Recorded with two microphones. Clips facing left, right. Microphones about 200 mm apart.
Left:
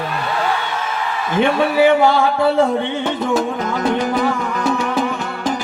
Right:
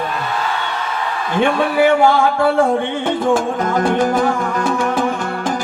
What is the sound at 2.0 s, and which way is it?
Music, 50° right (ahead or behind).